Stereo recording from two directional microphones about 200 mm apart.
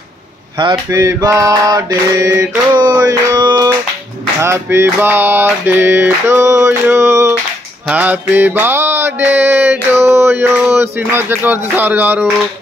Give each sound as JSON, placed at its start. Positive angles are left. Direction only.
{"t": 0.6, "sound": "mantra", "side_deg": -20}